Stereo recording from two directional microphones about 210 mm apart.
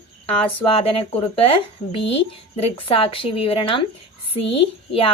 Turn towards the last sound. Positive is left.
turn(degrees=25)  # may be behind; listen again after turning